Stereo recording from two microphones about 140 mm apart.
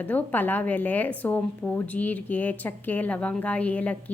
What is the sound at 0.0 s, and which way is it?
A woman's voice, 10° left (ahead or behind).